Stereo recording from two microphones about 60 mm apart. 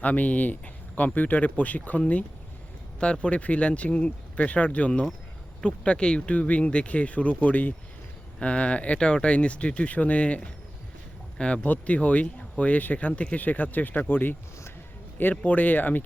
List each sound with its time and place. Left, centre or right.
0.0 s speech: left
15.4 s speech: left